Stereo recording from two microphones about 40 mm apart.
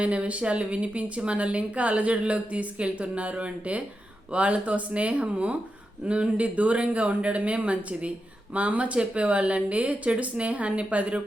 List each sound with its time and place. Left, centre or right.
0.0 s speech: right